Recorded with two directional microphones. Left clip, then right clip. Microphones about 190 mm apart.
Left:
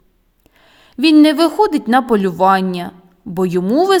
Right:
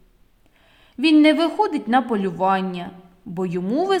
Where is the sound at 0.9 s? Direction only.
40° left (ahead or behind).